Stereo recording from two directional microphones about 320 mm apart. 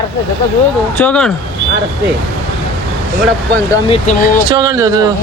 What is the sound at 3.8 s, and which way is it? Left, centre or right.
Speech, centre.